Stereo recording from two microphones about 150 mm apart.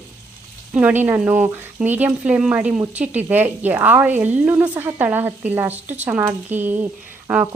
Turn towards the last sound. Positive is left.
turn(degrees=-5)  # may be behind; listen again after turning